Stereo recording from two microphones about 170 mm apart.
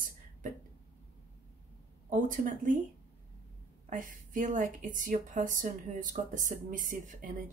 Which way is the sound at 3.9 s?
50° right (ahead or behind).